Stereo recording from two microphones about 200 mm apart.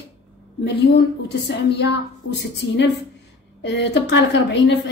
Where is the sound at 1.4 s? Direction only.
60° left (ahead or behind).